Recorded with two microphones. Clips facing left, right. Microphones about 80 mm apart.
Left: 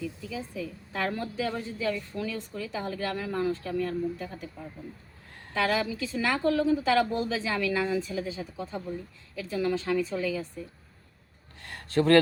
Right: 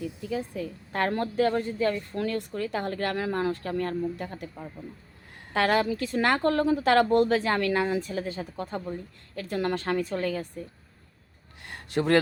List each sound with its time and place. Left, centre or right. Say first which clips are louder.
0.3 s a woman's voice: right 4 dB; right
5.5 s a woman's voice: right 3 dB; right
11.6 s a sound: left 2 dB; centre